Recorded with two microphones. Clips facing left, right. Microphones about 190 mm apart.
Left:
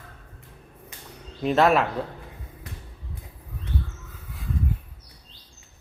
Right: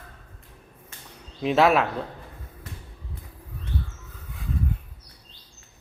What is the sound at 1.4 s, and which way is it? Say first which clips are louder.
Speech: even; centre (ahead or behind).